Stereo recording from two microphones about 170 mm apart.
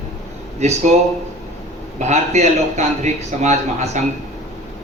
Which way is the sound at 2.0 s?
40° right (ahead or behind).